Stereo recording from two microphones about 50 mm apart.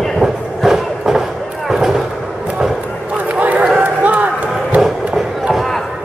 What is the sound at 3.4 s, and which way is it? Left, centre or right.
Run, right.